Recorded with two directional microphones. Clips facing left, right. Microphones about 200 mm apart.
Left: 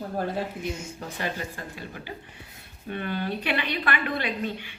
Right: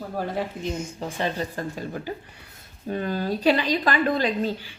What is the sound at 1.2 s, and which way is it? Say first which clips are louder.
Speech: right 5 dB; 35° right (ahead or behind).